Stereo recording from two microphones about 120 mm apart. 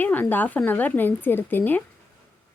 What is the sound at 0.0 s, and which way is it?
Speech, 15° left (ahead or behind).